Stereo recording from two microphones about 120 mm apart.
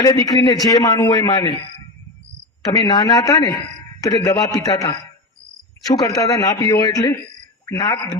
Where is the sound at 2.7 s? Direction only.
35° left (ahead or behind).